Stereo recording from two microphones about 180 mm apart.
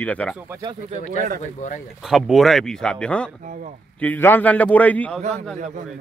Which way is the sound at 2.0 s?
Centre (ahead or behind).